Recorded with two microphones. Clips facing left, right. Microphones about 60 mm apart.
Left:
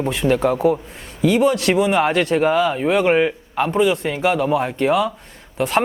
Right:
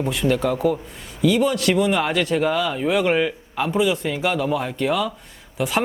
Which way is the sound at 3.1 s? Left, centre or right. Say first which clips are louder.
Left 4 dB; left.